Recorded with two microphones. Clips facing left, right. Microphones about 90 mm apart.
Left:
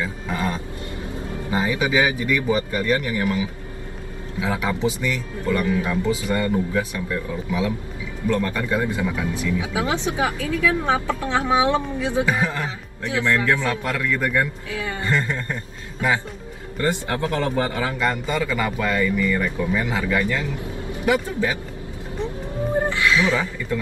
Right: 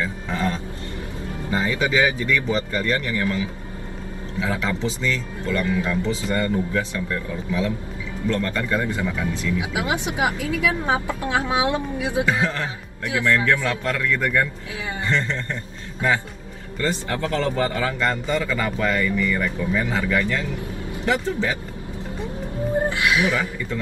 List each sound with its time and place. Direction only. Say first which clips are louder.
0.0 s a sound: right 1 dB; 15° left (ahead or behind)
1.5 s a man's voice: left 1 dB; 20° left (ahead or behind)
9.6 s speech: left 1 dB; 15° right (ahead or behind)
12.3 s speech: even; 15° left (ahead or behind)
14.7 s a man's voice: left 2 dB; 20° right (ahead or behind)
15.0 s a man's voice: even; 15° left (ahead or behind)
17.1 s a man's voice: left 1 dB; 20° left (ahead or behind)
22.8 s speech: left 2 dB; 15° right (ahead or behind)